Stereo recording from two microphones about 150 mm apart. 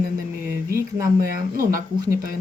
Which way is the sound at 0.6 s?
80° right.